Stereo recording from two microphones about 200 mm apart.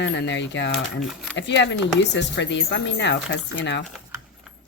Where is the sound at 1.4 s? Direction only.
60° left (ahead or behind).